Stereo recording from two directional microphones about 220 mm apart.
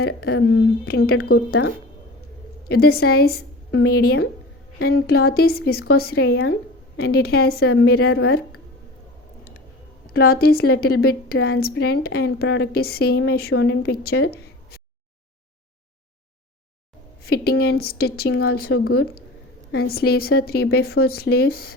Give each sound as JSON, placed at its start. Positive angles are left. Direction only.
{"t": 0.0, "sound": "a woman's voice", "side_deg": 45}
{"t": 1.5, "sound": "speech", "side_deg": 55}
{"t": 2.6, "sound": "a woman's voice", "side_deg": 45}
{"t": 10.1, "sound": "a woman's voice", "side_deg": 45}
{"t": 17.2, "sound": "a woman's voice", "side_deg": 45}